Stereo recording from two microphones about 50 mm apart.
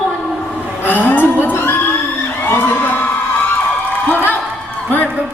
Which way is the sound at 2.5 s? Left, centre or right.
Left.